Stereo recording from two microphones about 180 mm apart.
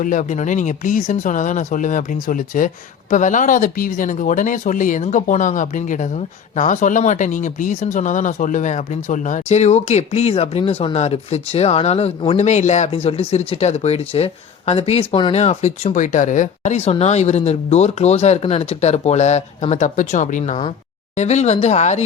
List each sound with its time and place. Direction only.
0.0 s speech: 45° left (ahead or behind)